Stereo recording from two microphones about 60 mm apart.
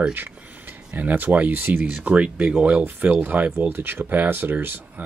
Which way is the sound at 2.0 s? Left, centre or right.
Right.